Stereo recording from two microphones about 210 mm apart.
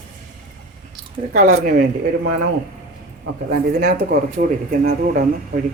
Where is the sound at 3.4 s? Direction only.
40° right (ahead or behind).